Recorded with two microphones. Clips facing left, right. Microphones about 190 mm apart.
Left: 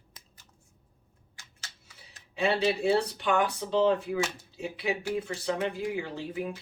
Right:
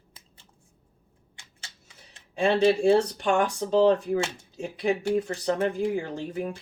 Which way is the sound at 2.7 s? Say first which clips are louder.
Right 6 dB; 50° right (ahead or behind).